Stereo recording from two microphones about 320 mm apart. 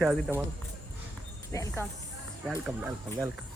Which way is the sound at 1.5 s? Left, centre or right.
Centre.